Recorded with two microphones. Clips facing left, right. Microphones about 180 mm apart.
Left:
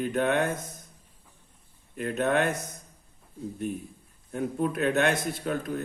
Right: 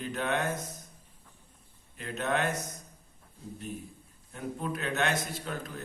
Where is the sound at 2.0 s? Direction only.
55° left (ahead or behind).